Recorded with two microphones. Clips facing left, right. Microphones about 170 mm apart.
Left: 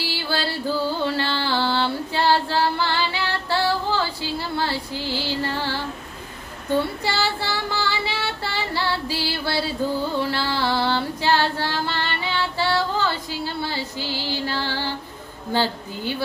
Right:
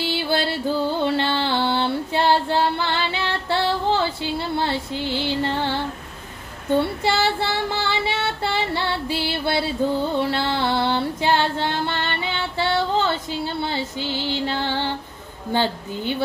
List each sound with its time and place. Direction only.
0.0 s music: 20° right (ahead or behind)
7.0 s female singing: 20° right (ahead or behind)